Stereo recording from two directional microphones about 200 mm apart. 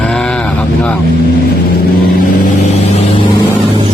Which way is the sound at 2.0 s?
50° left (ahead or behind).